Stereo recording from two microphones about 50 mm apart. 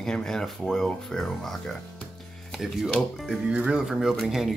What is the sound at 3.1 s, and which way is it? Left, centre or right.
Speech, centre.